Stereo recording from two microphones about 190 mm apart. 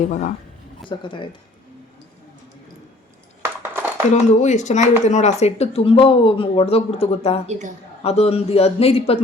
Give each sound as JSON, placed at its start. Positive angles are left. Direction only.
{"t": 0.0, "sound": "speech", "side_deg": 40}
{"t": 0.9, "sound": "speech", "side_deg": 25}
{"t": 3.6, "sound": "a sound", "side_deg": -10}
{"t": 4.1, "sound": "speech", "side_deg": 40}